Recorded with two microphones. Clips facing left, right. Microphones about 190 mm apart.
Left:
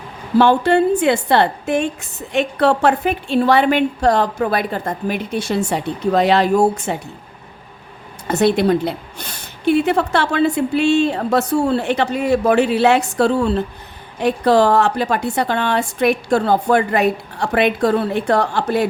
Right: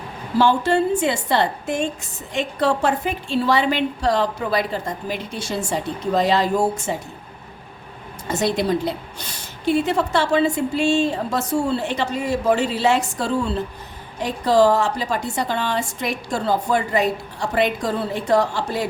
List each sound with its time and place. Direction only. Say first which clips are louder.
0.3 s a woman's voice: left 4 dB; 60° left (ahead or behind)
8.3 s a woman's voice: left 6 dB; 60° left (ahead or behind)